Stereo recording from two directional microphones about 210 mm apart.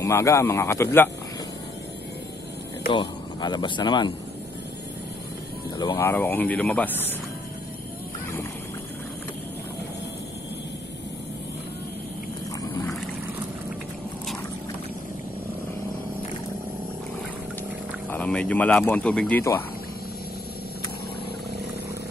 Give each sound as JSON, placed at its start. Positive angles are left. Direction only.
{"t": 0.0, "sound": "speech", "side_deg": 15}
{"t": 2.9, "sound": "speech", "side_deg": 20}
{"t": 5.9, "sound": "speech", "side_deg": 10}
{"t": 18.1, "sound": "speech", "side_deg": 5}